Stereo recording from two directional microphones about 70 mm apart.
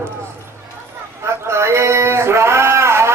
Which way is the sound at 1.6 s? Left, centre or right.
Right.